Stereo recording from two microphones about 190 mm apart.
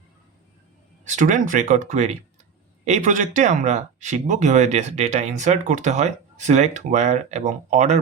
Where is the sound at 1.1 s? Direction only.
40° right (ahead or behind).